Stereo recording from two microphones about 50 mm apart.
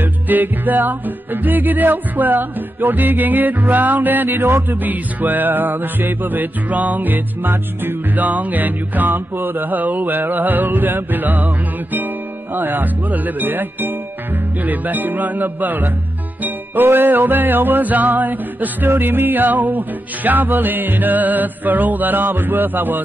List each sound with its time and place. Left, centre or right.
0.0 s music: right
4.6 s music: right